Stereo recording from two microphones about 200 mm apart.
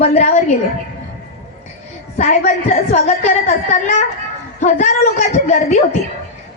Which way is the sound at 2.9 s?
35° left (ahead or behind).